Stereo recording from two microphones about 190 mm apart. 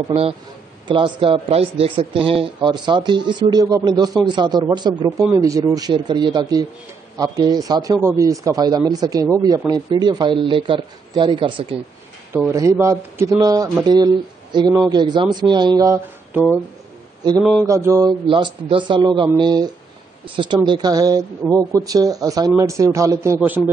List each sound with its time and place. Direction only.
0.1 s a man's voice: 30° right (ahead or behind)
12.4 s a man's voice: 15° right (ahead or behind)
17.4 s mantra: centre (ahead or behind)
17.6 s a man's voice: 15° right (ahead or behind)